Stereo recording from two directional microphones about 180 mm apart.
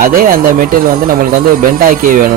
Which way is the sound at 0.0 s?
50° right (ahead or behind).